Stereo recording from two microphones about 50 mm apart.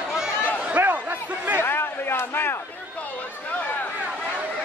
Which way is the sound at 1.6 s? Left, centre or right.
Left.